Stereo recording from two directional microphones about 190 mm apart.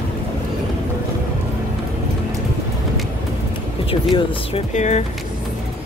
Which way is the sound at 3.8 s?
25° left (ahead or behind).